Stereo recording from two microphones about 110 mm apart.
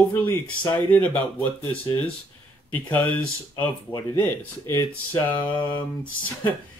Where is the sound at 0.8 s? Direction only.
15° left (ahead or behind).